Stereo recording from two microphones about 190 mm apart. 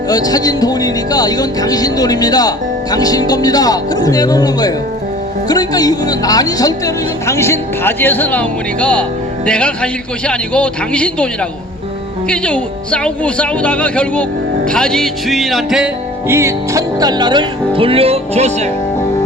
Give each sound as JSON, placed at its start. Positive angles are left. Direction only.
{"t": 0.1, "sound": "speech", "side_deg": 20}
{"t": 12.3, "sound": "speech", "side_deg": 5}
{"t": 16.3, "sound": "speech", "side_deg": -15}